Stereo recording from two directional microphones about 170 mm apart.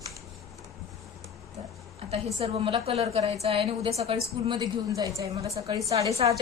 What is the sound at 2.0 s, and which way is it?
A woman's voice, 35° right (ahead or behind).